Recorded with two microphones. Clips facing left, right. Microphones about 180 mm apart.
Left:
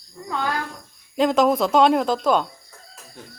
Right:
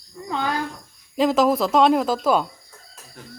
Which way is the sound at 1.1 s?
Centre (ahead or behind).